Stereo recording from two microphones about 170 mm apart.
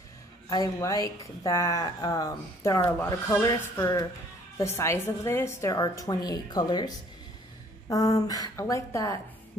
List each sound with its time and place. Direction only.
0.5 s speech: 20° left (ahead or behind)
8.2 s speech: 20° left (ahead or behind)